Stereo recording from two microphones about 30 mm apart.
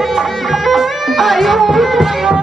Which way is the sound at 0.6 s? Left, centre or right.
Centre.